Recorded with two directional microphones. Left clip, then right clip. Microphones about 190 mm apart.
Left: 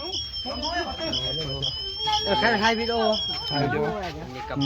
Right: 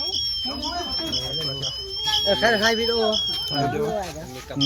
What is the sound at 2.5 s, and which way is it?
Speech, 15° left (ahead or behind).